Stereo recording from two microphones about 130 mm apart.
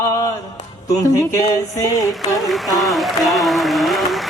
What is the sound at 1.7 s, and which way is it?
Speech, 25° left (ahead or behind).